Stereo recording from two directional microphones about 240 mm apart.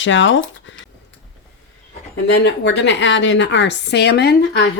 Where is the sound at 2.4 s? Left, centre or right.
Left.